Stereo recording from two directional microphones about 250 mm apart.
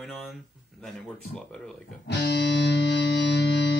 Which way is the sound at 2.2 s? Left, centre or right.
Left.